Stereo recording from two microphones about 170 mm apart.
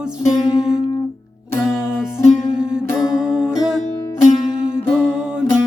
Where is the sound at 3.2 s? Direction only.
5° right (ahead or behind).